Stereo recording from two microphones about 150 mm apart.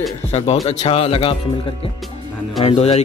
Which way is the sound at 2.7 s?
45° left (ahead or behind).